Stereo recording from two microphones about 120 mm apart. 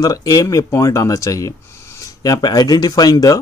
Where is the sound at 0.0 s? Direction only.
30° left (ahead or behind).